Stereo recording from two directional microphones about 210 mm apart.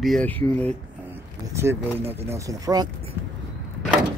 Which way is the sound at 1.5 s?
15° right (ahead or behind).